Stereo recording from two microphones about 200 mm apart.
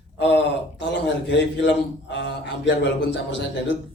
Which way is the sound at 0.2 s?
60° left (ahead or behind).